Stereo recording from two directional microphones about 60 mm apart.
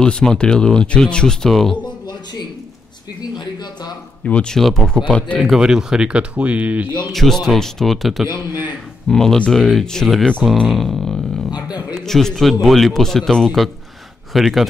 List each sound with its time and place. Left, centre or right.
0.0 s speech: centre
4.3 s speech: centre
4.6 s speech: centre
5.4 s speech: centre; by 6.9 s right
7.1 s speech: centre